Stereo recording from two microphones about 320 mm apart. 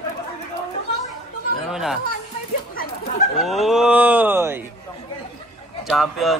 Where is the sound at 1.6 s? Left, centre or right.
Centre.